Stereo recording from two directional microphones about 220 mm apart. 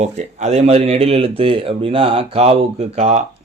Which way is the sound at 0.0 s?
30° right (ahead or behind).